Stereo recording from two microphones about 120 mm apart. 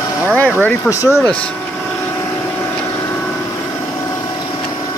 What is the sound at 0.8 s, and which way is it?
Speech, 25° left (ahead or behind).